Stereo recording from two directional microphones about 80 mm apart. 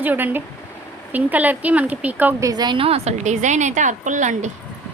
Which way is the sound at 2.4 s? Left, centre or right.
Right.